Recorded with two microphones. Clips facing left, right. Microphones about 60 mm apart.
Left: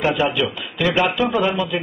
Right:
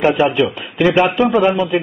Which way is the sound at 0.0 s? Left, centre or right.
Right.